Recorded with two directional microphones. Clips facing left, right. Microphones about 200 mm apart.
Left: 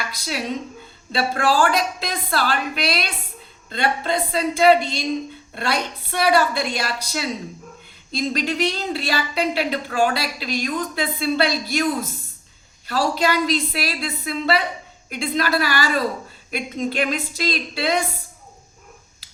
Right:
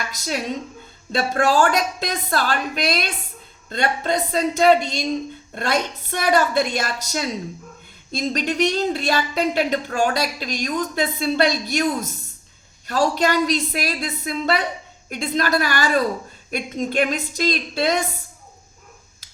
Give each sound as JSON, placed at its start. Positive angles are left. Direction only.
{"t": 0.1, "sound": "a woman's voice", "side_deg": -45}